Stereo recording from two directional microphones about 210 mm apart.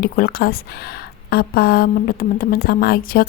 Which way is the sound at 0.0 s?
45° left (ahead or behind).